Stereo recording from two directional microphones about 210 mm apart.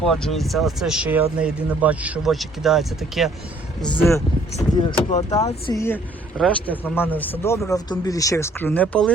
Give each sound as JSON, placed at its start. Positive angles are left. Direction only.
{"t": 0.0, "sound": "speech", "side_deg": 0}
{"t": 4.5, "sound": "speech", "side_deg": 20}